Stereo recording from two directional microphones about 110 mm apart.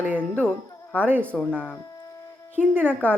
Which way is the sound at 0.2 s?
10° left (ahead or behind).